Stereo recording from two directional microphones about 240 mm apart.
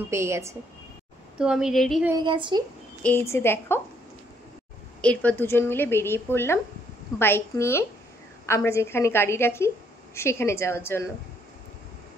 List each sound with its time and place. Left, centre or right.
0.1 s a woman's voice: centre
2.1 s a woman's voice: centre
3.0 s speech: centre
5.0 s speech: centre